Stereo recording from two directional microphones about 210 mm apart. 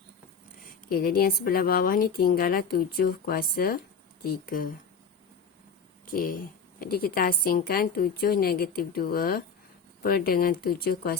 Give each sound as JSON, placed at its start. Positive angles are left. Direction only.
{"t": 0.9, "sound": "a woman's voice", "side_deg": 45}
{"t": 6.1, "sound": "a woman's voice", "side_deg": 40}